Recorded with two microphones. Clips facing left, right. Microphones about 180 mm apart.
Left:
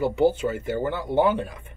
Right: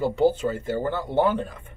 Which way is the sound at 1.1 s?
10° left (ahead or behind).